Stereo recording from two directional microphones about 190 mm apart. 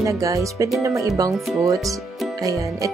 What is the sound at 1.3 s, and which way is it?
Speech, centre (ahead or behind).